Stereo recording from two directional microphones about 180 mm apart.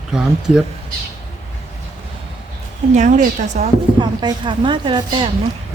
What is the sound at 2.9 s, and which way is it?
Speech, 40° right (ahead or behind).